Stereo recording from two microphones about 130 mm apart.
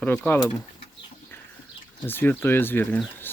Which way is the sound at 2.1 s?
15° left (ahead or behind).